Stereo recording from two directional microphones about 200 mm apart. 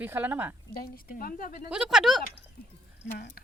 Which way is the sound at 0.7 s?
45° left (ahead or behind).